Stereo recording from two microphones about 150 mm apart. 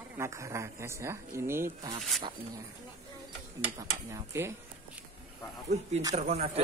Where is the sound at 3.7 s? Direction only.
20° right (ahead or behind).